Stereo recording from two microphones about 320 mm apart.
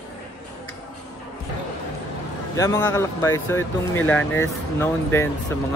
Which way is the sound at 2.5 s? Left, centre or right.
Centre.